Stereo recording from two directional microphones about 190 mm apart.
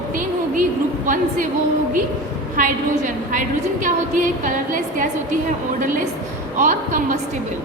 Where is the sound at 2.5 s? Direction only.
45° right (ahead or behind).